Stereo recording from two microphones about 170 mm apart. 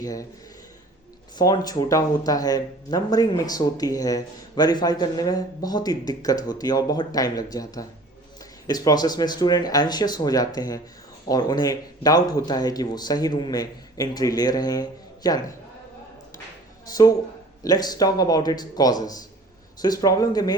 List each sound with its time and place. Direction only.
0.0 s speech: 20° left (ahead or behind)
1.4 s speech: 20° left (ahead or behind)
16.9 s speech: 20° left (ahead or behind)